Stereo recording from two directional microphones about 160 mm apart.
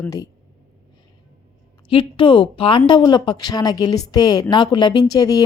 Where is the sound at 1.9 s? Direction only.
35° left (ahead or behind).